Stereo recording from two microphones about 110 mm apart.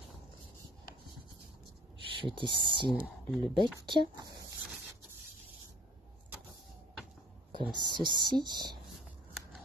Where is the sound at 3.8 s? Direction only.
45° right (ahead or behind).